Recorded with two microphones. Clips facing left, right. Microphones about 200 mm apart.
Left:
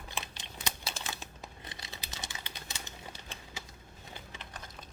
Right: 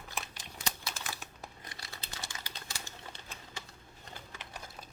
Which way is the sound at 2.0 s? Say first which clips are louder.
Right 1 dB; 15° left (ahead or behind).